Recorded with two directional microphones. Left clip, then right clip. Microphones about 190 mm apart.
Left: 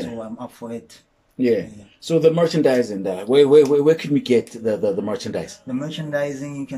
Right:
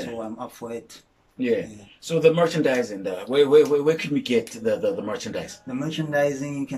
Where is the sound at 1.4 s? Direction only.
25° left (ahead or behind).